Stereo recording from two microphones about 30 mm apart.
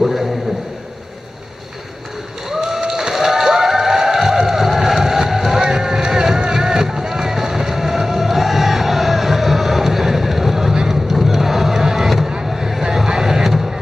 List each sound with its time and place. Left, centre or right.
0.0 s a sound: centre
2.8 s a sound: centre
5.6 s boat: right
10.7 s vehicle: right
11.1 s crowd: centre
12.4 s vehicle: centre
12.8 s vehicle: right